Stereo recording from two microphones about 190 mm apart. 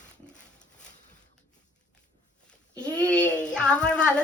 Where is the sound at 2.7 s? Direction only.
5° left (ahead or behind).